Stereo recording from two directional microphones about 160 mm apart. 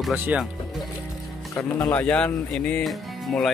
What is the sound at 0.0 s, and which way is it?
Speech, 10° right (ahead or behind).